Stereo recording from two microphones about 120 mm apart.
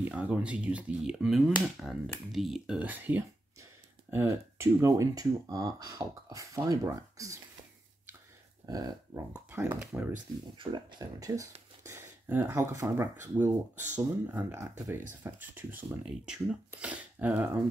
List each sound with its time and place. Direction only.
0.0 s speech: 10° right (ahead or behind); by 7.3 s 30° right (ahead or behind)
8.6 s dog: 35° right (ahead or behind)
9.3 s speech: 15° right (ahead or behind)
10.6 s speech: 35° right (ahead or behind); by 17.5 s 15° right (ahead or behind)